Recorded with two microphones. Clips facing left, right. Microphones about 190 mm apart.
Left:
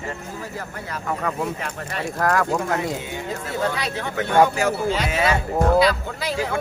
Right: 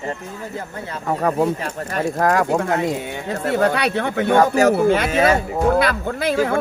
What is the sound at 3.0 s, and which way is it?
Speech, 65° right (ahead or behind).